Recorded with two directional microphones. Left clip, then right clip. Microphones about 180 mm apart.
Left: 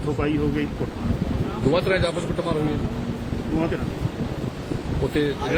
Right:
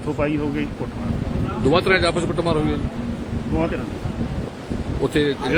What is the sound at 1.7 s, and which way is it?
Speech, 55° right (ahead or behind).